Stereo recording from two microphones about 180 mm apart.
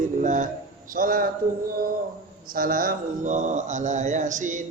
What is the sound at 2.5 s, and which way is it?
A man's voice, 50° right (ahead or behind).